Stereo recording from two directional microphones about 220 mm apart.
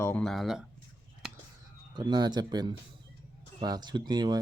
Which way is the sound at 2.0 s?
20° right (ahead or behind).